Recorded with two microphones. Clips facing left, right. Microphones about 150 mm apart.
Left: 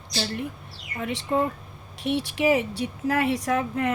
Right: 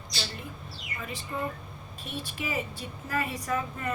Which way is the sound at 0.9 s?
70° left (ahead or behind).